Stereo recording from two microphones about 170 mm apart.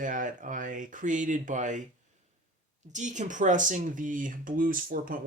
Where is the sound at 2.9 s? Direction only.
45° right (ahead or behind).